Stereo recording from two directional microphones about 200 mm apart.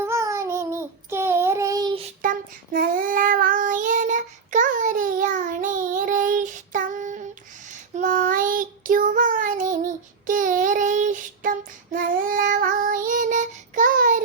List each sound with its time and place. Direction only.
0.0 s child singing: 15° right (ahead or behind)
2.2 s child singing: 40° right (ahead or behind)